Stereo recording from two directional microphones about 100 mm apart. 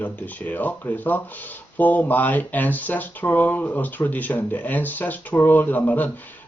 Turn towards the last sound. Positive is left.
turn(degrees=15)  # may be behind; listen again after turning